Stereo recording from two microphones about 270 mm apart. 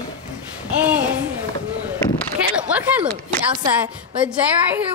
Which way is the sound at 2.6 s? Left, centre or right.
Centre.